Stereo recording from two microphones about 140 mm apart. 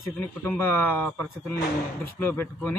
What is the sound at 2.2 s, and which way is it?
Speech, 15° left (ahead or behind).